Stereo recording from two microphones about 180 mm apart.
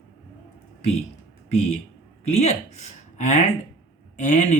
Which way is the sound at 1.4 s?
35° left (ahead or behind).